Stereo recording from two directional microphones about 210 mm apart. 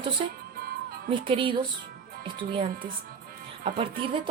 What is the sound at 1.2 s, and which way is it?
Speech, 25° right (ahead or behind).